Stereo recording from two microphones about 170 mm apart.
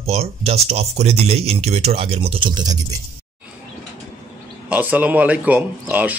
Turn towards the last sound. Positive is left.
turn(degrees=-10)  # may be behind; listen again after turning